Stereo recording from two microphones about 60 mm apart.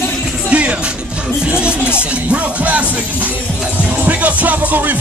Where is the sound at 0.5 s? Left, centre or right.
Right.